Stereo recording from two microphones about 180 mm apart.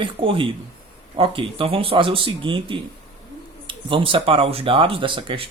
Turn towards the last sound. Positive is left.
turn(degrees=-30)  # may be behind; listen again after turning